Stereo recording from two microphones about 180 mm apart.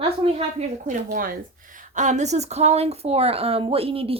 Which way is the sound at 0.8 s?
55° right (ahead or behind).